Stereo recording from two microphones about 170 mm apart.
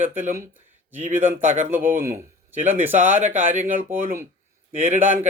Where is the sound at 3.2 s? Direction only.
50° right (ahead or behind).